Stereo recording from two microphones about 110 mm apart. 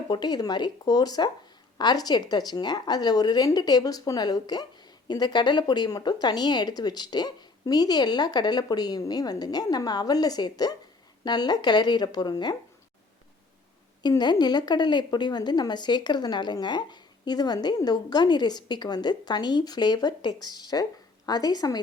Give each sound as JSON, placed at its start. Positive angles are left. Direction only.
{"t": 0.1, "sound": "a woman's voice", "side_deg": 40}
{"t": 14.0, "sound": "a woman's voice", "side_deg": 40}